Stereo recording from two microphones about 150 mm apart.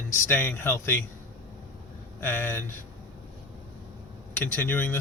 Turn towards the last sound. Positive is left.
turn(degrees=15)  # may be behind; listen again after turning